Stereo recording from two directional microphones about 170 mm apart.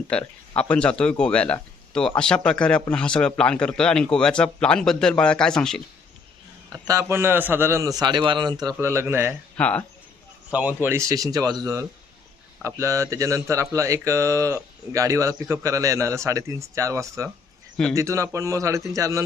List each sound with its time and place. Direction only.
0.1 s a man's voice: 5° left (ahead or behind)
6.7 s speech: 20° right (ahead or behind)
9.6 s speech: 10° left (ahead or behind)
10.5 s a man's voice: 10° right (ahead or behind)